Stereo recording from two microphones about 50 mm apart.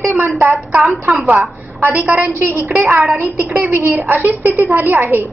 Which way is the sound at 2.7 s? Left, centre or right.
Right.